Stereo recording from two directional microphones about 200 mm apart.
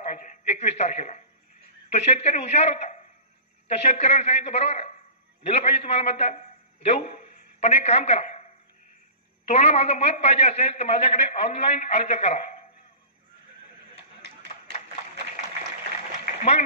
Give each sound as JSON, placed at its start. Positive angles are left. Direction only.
{"t": 0.5, "sound": "a man's voice", "side_deg": 35}
{"t": 9.5, "sound": "a man's voice", "side_deg": 35}